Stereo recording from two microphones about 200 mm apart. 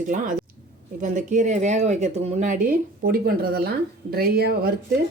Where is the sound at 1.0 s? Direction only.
40° right (ahead or behind).